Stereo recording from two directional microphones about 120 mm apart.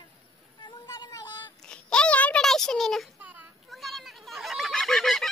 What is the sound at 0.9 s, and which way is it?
Child singing, 35° left (ahead or behind).